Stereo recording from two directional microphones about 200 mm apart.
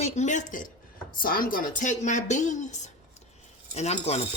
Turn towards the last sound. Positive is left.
turn(degrees=35)  # may be behind; listen again after turning